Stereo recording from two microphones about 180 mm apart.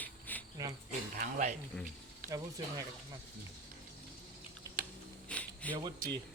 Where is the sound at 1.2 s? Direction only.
45° right (ahead or behind).